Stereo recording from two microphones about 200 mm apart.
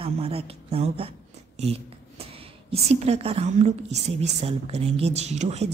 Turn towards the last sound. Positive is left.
turn(degrees=-35)  # may be behind; listen again after turning